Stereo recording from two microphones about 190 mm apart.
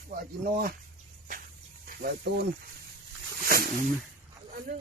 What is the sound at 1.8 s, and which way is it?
Speech, 55° right (ahead or behind).